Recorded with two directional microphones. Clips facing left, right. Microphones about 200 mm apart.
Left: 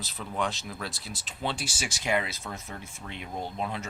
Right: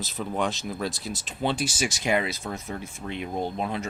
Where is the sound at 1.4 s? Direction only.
20° right (ahead or behind).